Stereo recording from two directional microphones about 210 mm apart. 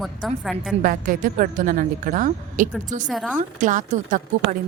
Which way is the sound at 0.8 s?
40° right (ahead or behind).